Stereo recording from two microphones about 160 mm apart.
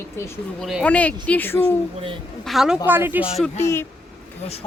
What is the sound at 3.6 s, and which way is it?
Speech, 15° left (ahead or behind).